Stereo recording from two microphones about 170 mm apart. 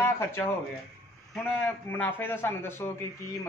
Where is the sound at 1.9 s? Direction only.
10° left (ahead or behind).